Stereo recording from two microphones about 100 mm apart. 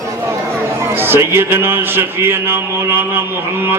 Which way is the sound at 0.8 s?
25° right (ahead or behind).